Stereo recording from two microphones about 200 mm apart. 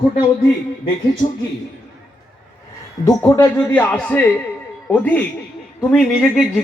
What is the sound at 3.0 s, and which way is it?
A man's voice, 15° left (ahead or behind).